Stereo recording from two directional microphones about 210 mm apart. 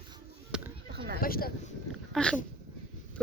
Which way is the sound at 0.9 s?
50° right (ahead or behind).